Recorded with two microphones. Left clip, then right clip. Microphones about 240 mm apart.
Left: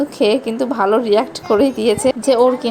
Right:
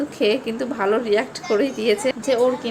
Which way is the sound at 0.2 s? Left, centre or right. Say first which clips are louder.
Left 5 dB; centre.